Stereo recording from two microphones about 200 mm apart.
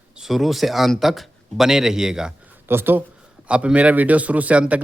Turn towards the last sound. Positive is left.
turn(degrees=-5)  # may be behind; listen again after turning